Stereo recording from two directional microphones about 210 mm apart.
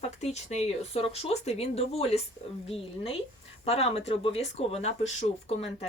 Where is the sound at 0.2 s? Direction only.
30° left (ahead or behind).